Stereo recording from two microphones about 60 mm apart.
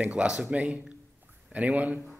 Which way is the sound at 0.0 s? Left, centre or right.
Right.